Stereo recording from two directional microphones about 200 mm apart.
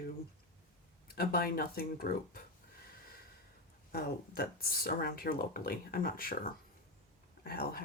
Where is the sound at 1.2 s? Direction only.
50° left (ahead or behind).